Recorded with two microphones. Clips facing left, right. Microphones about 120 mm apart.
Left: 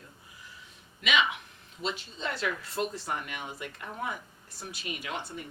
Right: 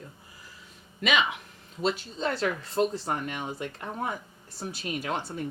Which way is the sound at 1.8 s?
40° right (ahead or behind).